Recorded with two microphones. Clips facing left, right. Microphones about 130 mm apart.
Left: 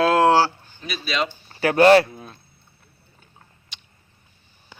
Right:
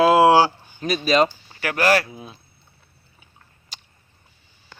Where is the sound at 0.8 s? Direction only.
40° right (ahead or behind).